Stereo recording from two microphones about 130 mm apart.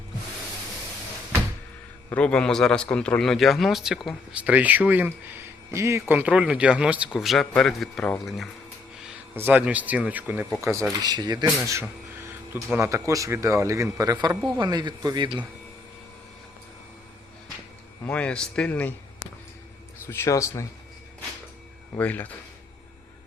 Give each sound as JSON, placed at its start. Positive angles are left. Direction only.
{"t": 2.0, "sound": "a man's voice", "side_deg": 10}
{"t": 9.3, "sound": "speech", "side_deg": -15}
{"t": 10.6, "sound": "speech", "side_deg": -20}
{"t": 18.0, "sound": "speech", "side_deg": 10}
{"t": 20.1, "sound": "speech", "side_deg": 20}
{"t": 21.9, "sound": "speech", "side_deg": 15}